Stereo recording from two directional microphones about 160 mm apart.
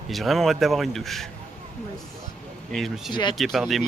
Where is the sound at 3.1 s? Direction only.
30° left (ahead or behind).